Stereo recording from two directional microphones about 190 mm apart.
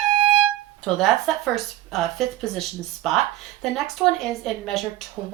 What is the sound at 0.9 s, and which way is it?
Speech, centre (ahead or behind).